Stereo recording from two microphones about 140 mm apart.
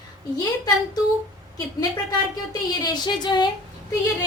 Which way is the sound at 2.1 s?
30° left (ahead or behind).